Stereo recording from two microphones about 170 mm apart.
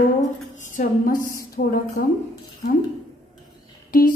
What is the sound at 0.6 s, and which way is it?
A woman's voice, 45° left (ahead or behind).